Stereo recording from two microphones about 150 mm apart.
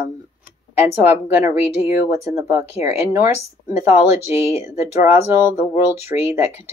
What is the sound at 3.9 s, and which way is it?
Speech, 45° left (ahead or behind).